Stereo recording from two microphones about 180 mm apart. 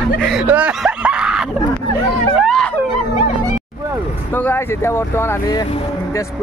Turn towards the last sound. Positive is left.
turn(degrees=10)  # may be behind; listen again after turning